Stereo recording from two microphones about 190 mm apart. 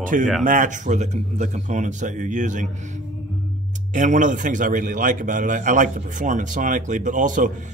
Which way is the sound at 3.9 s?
40° right (ahead or behind).